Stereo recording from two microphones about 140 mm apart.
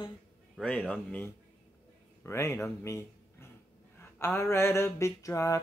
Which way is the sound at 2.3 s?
20° left (ahead or behind).